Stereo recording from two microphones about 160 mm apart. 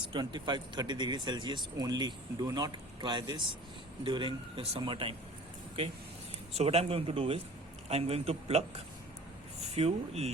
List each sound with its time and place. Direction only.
0.1 s speech: 30° right (ahead or behind)
6.5 s speech: 40° right (ahead or behind)